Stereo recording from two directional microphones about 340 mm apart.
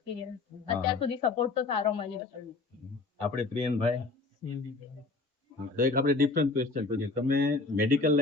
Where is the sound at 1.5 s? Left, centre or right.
Centre.